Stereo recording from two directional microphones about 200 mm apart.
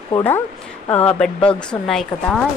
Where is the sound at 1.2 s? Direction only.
5° left (ahead or behind).